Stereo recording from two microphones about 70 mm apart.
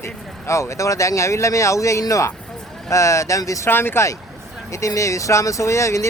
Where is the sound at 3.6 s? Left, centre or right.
Left.